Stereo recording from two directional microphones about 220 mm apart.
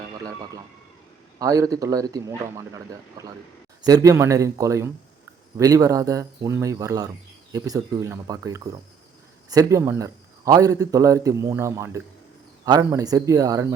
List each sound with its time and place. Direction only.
1.4 s a man's voice: 15° right (ahead or behind)